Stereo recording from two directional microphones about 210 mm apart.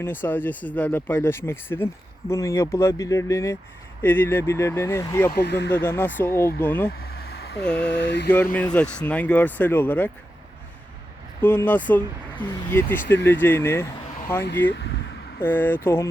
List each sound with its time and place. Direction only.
0.0 s speech: 10° left (ahead or behind)
5.3 s speech: 50° left (ahead or behind)
5.7 s speech: 10° left (ahead or behind)
6.9 s a sound: 45° left (ahead or behind)
7.8 s mantra: 55° left (ahead or behind)
8.5 s speech: 5° left (ahead or behind)
11.4 s speech: 10° left (ahead or behind)
14.4 s mantra: 55° left (ahead or behind)
15.4 s speech: 10° left (ahead or behind)